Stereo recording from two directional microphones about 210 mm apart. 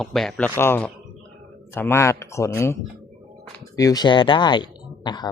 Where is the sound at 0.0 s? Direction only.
Centre (ahead or behind).